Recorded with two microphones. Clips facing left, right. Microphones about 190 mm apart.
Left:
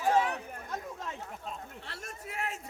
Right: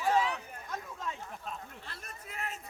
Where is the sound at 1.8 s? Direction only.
75° left (ahead or behind).